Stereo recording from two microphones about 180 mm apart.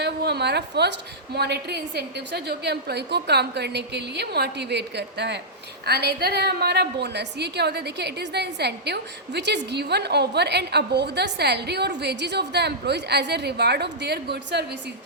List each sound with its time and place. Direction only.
0.0 s a woman's voice: 65° right (ahead or behind)